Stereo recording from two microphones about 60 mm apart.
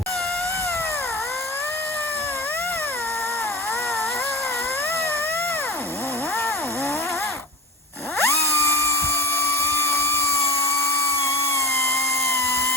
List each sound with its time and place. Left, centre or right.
8.2 s dental drill: left